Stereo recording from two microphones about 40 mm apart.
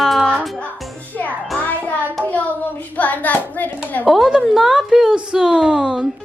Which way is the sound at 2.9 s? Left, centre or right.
Left.